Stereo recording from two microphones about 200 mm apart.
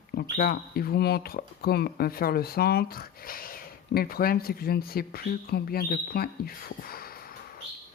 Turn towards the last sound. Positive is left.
turn(degrees=50)  # may be behind; listen again after turning